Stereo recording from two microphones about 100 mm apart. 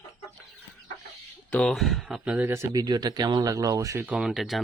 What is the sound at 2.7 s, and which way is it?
Speech, 40° right (ahead or behind).